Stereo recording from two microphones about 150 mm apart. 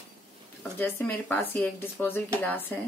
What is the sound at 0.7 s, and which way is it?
Speech, 15° left (ahead or behind).